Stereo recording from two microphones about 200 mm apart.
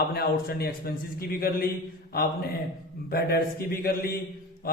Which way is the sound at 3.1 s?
50° left (ahead or behind).